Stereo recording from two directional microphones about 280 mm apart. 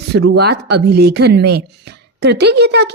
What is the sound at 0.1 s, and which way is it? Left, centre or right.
Speech, right.